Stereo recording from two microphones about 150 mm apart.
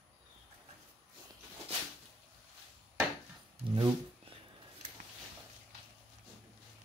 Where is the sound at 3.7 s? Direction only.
35° right (ahead or behind).